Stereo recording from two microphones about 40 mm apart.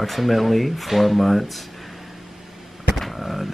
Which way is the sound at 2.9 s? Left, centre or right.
Centre.